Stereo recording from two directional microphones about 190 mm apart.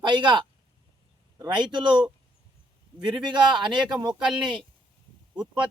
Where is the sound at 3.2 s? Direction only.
25° right (ahead or behind).